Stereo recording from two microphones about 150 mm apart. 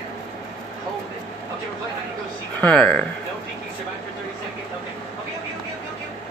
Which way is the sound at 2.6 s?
5° left (ahead or behind).